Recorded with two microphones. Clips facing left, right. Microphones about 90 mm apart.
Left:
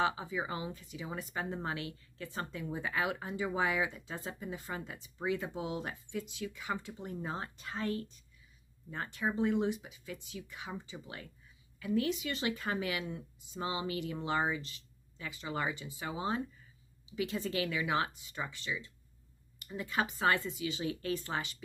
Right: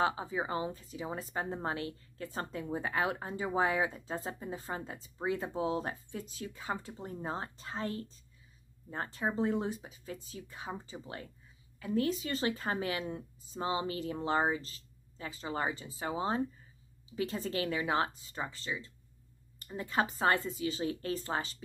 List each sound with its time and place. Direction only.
0.0 s speech: 35° right (ahead or behind)